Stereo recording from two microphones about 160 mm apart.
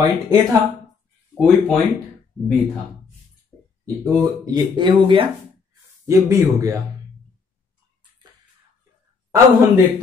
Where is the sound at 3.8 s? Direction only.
25° right (ahead or behind).